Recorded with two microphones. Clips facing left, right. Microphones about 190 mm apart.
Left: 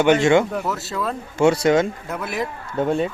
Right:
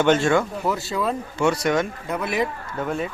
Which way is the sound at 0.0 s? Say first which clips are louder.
Left 3 dB; 15° left (ahead or behind).